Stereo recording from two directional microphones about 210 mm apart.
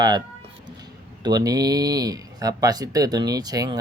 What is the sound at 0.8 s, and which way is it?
Speech, 20° right (ahead or behind).